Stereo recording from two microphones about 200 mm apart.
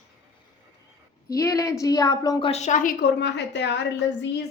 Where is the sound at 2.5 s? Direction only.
35° left (ahead or behind); by 3.7 s 60° left (ahead or behind).